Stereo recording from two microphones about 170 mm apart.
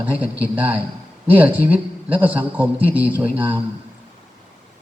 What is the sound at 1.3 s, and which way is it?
Speech, 10° right (ahead or behind).